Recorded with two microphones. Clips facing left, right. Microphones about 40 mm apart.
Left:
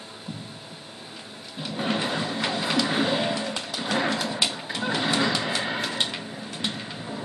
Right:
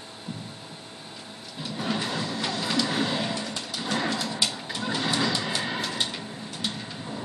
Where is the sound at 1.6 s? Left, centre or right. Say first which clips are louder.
Left 3 dB; left.